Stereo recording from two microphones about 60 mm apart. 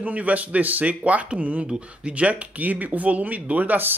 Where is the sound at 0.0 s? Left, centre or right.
Right.